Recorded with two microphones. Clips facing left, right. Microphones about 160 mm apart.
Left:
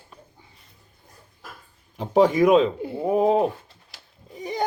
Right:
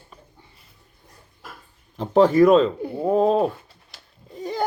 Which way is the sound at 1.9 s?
10° left (ahead or behind).